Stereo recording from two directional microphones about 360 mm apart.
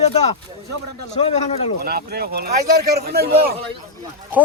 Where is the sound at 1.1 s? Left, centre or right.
Centre.